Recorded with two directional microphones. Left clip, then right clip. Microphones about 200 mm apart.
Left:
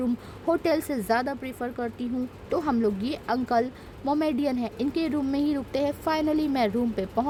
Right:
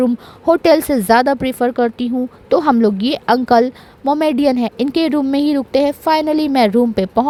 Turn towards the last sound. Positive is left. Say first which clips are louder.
# right 13 dB
turn(degrees=-35)  # may be behind; listen again after turning